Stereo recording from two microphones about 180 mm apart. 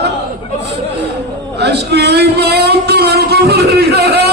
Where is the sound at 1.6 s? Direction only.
65° right (ahead or behind).